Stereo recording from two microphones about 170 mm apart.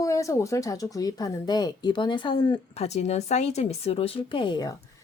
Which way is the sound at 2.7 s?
40° left (ahead or behind).